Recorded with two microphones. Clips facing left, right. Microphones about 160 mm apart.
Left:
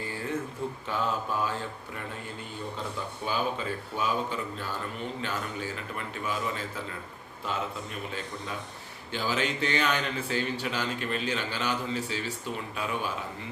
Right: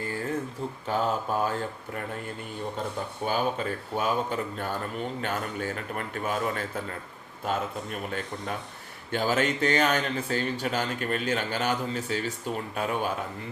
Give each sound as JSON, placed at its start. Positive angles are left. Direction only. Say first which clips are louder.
{"t": 0.9, "sound": "a man's voice", "louder": "right 4 dB", "side_deg": -40}
{"t": 3.2, "sound": "a man's voice", "louder": "right 3 dB", "side_deg": -50}